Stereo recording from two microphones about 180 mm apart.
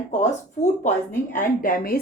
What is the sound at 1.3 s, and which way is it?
Speech, 50° left (ahead or behind).